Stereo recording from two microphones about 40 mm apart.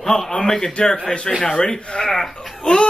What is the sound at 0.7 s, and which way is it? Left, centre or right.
Speech, left.